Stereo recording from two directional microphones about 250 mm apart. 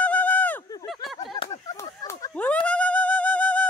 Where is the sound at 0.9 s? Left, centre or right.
Centre.